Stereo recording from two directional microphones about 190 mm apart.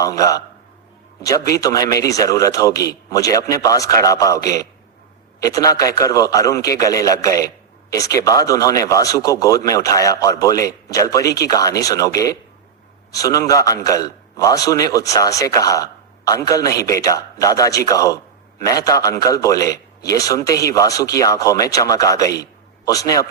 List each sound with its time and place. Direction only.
0.0 s a man's voice: 20° left (ahead or behind)